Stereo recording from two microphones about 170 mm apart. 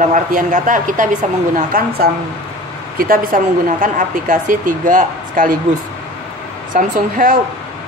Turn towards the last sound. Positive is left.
turn(degrees=-50)  # may be behind; listen again after turning